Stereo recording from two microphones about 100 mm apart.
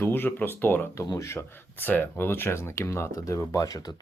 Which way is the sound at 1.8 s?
20° left (ahead or behind).